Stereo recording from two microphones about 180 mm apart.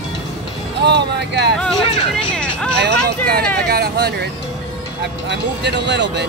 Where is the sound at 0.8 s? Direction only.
65° right (ahead or behind).